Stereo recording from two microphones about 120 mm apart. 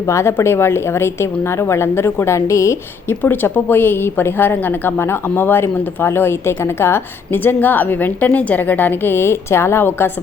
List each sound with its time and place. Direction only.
0.0 s a woman's voice: 25° left (ahead or behind)